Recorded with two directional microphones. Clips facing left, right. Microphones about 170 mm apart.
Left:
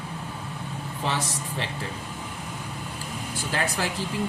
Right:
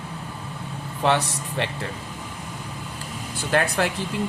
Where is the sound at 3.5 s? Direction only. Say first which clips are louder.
Right 6 dB; 60° right (ahead or behind).